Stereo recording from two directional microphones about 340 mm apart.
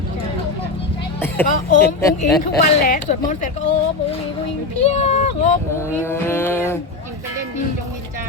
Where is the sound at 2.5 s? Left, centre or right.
Left.